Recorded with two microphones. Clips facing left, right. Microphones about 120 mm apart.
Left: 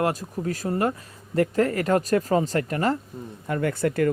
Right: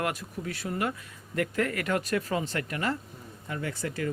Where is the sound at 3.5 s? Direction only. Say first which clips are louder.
Left 10 dB; 55° left (ahead or behind).